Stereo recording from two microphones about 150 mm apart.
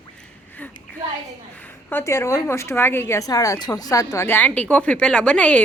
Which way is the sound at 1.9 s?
15° left (ahead or behind).